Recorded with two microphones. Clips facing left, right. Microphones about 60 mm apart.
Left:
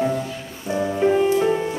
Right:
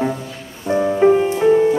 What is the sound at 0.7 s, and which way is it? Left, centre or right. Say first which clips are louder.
Music: right 6 dB; right.